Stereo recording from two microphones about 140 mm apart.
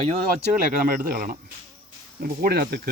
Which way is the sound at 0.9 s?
90° right.